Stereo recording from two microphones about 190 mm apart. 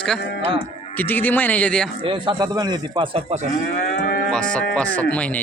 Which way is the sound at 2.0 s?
25° right (ahead or behind).